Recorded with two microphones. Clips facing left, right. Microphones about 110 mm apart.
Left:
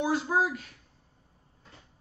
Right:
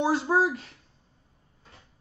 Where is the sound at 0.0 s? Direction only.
30° right (ahead or behind).